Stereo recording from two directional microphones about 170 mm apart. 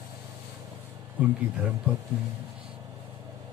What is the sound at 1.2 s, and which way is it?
Speech, 10° right (ahead or behind).